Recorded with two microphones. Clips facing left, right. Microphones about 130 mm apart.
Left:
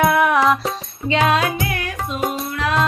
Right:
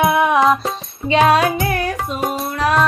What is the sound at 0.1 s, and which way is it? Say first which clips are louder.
Music: right 2 dB; 20° right (ahead or behind).